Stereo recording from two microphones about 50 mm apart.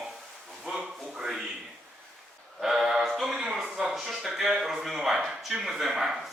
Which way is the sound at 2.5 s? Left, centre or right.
Centre.